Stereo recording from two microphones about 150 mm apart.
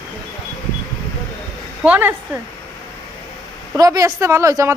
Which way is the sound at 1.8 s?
10° right (ahead or behind).